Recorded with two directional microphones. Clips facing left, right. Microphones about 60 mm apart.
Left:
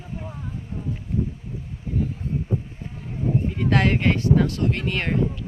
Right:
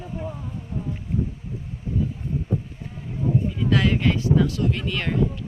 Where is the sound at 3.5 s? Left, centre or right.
Left.